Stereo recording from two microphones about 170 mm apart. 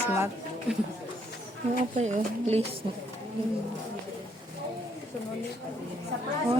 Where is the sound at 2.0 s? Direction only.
40° right (ahead or behind).